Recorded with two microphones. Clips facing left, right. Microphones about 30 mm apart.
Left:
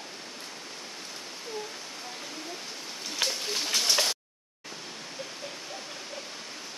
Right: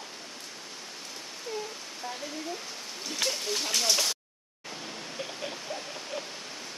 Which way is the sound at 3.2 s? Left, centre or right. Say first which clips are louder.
Even; centre.